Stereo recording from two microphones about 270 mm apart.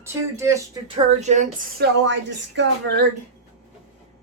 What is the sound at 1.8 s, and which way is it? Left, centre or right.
Speech, right.